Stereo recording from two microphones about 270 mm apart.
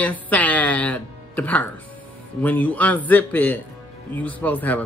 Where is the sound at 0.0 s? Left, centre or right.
Centre.